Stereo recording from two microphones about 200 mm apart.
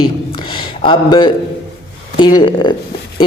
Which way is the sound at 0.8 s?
25° left (ahead or behind).